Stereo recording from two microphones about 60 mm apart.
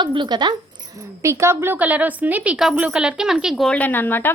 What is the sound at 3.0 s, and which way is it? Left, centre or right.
Speech, centre.